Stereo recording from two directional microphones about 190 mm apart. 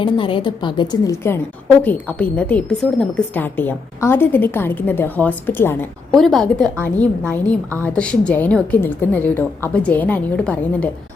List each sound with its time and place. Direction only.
0.0 s a woman's voice: 25° left (ahead or behind); by 10.8 s 5° left (ahead or behind)